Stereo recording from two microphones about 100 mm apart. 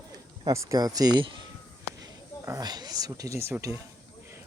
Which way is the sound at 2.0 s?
35° right (ahead or behind).